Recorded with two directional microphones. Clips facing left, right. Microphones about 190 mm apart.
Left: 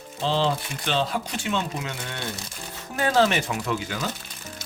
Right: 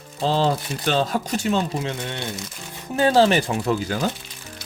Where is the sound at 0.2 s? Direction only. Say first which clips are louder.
Right 3 dB; 40° right (ahead or behind).